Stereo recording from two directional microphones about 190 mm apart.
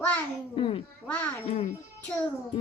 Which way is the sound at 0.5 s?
30° left (ahead or behind).